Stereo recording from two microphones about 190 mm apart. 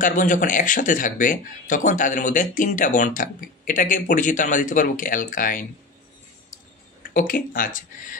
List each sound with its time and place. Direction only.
0.0 s speech: 45° left (ahead or behind)
7.0 s speech: 45° left (ahead or behind)